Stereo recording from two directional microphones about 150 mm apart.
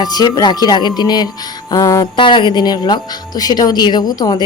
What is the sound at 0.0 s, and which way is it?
Speech, 25° left (ahead or behind).